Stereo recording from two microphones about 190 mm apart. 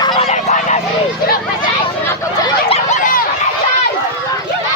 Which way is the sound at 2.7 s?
40° left (ahead or behind).